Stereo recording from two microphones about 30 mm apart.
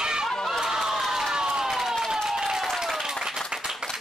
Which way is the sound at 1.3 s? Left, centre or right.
Right.